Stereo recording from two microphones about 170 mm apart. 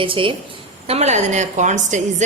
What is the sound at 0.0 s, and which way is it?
Speech, 30° right (ahead or behind).